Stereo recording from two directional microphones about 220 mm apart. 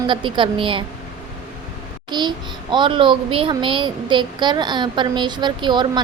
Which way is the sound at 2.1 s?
20° right (ahead or behind).